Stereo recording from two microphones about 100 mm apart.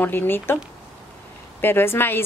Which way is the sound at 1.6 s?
20° left (ahead or behind).